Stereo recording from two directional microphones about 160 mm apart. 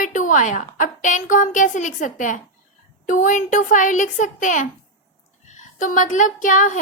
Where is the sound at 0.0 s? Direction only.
55° left (ahead or behind).